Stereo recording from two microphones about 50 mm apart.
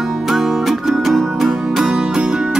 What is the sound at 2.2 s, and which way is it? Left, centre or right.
Music, centre.